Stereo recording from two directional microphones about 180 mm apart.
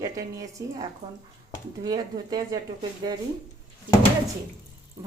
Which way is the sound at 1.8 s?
20° right (ahead or behind).